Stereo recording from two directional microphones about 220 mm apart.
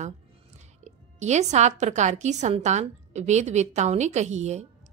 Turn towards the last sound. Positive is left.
turn(degrees=-30)  # may be behind; listen again after turning